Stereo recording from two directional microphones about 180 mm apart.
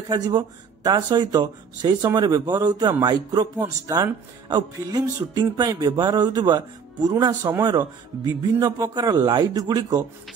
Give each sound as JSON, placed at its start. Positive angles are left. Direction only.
{"t": 0.1, "sound": "a man's voice", "side_deg": -25}